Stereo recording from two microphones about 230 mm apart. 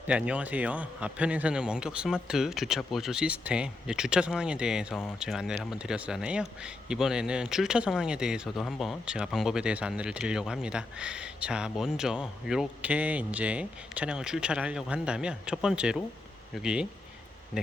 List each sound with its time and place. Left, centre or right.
0.1 s speech: centre